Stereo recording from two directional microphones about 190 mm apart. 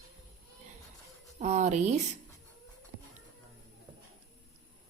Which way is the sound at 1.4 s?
40° right (ahead or behind).